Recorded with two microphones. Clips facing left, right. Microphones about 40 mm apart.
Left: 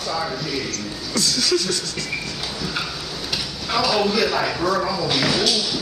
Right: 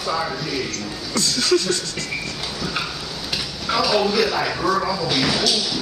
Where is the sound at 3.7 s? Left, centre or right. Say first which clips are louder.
Right 1 dB; centre.